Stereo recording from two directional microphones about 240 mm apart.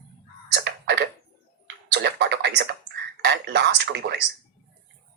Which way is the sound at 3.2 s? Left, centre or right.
Right.